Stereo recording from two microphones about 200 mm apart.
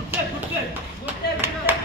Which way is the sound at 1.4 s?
10° right (ahead or behind).